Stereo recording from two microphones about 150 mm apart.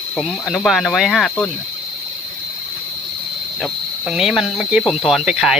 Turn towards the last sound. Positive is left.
turn(degrees=-5)  # may be behind; listen again after turning